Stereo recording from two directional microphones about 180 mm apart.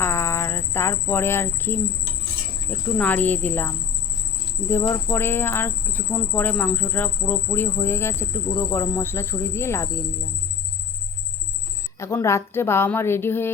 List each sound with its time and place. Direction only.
0.0 s cricket: 15° left (ahead or behind)
2.6 s speech: 10° left (ahead or behind)
11.9 s speech: 15° left (ahead or behind)